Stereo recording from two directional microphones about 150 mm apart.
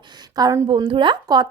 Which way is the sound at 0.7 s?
35° right (ahead or behind).